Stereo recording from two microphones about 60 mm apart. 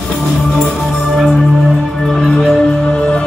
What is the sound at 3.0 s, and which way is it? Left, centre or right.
Music, centre.